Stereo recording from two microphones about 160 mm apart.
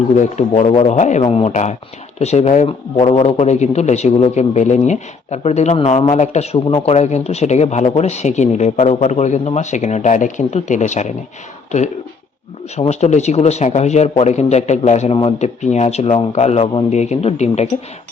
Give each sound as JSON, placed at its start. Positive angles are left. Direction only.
{"t": 0.2, "sound": "speech", "side_deg": 45}
{"t": 2.6, "sound": "a man's voice", "side_deg": 35}
{"t": 12.7, "sound": "speech", "side_deg": 45}